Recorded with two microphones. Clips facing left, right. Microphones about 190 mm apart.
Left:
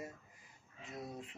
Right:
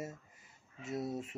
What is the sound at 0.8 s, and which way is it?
Speech, 90° right.